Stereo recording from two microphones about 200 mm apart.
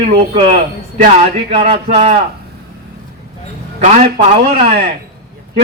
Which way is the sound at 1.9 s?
35° right (ahead or behind).